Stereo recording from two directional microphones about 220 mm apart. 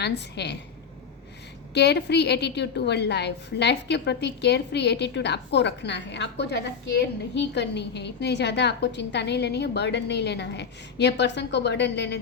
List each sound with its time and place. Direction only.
0.0 s a woman's voice: 50° left (ahead or behind)
1.7 s a woman's voice: 50° left (ahead or behind)